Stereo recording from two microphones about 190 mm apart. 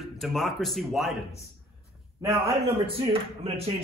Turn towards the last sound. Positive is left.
turn(degrees=-30)  # may be behind; listen again after turning